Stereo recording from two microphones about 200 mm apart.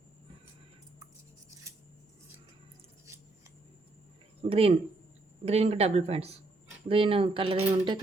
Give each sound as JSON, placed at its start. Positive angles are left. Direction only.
{"t": 4.4, "sound": "speech", "side_deg": -30}